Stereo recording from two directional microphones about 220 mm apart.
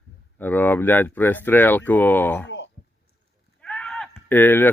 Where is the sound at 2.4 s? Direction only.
55° left (ahead or behind).